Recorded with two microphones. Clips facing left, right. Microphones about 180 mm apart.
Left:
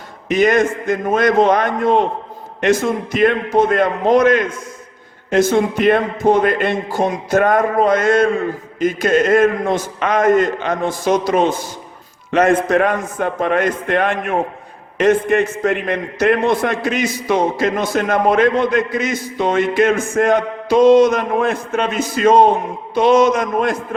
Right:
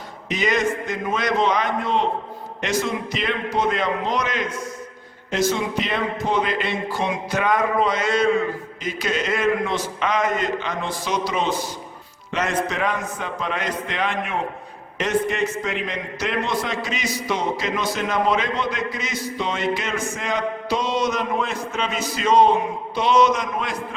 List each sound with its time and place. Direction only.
0.3 s a man's voice: 50° left (ahead or behind)